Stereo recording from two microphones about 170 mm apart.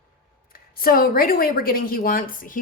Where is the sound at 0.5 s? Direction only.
60° left (ahead or behind).